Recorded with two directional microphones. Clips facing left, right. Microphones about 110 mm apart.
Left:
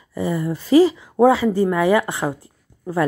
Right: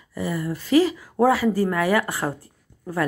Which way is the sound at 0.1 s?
25° left (ahead or behind).